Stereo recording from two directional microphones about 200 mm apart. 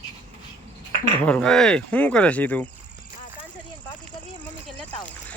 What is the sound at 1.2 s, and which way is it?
Speech, 5° left (ahead or behind).